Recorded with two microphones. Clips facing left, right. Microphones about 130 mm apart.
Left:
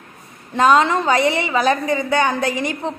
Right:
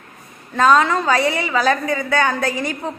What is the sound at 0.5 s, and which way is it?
A woman's voice, 20° left (ahead or behind).